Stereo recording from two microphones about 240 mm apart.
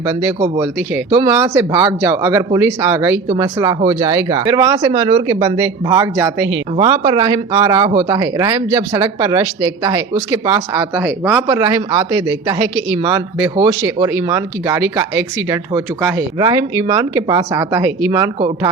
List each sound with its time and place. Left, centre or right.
0.2 s speech: centre